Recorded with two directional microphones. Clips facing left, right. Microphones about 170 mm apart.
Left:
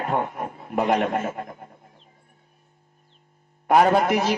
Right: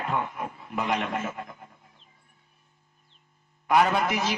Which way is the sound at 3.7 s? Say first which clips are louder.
Left 5 dB; 40° left (ahead or behind).